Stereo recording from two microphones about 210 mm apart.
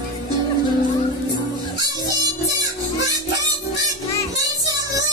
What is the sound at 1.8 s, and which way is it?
Music, 15° right (ahead or behind).